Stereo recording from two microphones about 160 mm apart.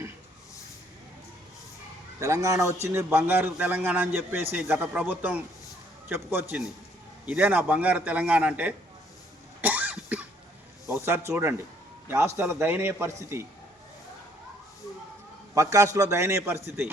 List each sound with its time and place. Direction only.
2.1 s a man's voice: 20° right (ahead or behind)
9.6 s cough: 10° right (ahead or behind)
10.8 s a man's voice: 15° right (ahead or behind)
15.5 s a man's voice: 20° right (ahead or behind)